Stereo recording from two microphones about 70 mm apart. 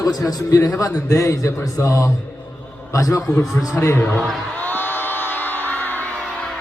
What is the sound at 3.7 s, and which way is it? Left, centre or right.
Speech, left.